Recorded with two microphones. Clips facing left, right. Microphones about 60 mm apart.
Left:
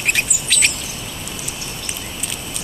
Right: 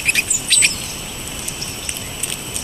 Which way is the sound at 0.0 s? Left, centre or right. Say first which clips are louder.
Even; centre.